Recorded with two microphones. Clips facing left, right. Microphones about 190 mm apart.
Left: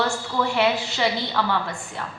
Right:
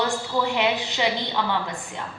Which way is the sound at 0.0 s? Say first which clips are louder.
Even; 15° right (ahead or behind).